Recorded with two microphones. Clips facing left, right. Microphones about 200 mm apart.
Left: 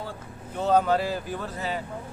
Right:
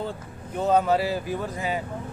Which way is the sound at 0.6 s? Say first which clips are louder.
Right 1 dB; 5° right (ahead or behind).